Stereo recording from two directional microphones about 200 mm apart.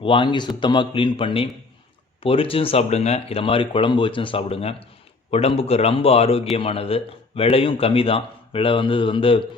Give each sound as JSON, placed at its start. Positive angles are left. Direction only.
{"t": 0.0, "sound": "speech", "side_deg": 25}